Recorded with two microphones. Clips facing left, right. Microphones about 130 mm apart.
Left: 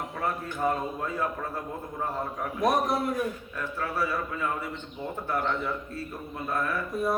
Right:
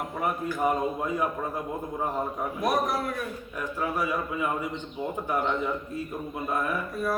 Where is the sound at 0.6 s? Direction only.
15° right (ahead or behind).